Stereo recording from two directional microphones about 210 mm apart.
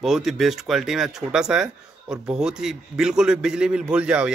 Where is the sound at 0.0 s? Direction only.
Centre (ahead or behind).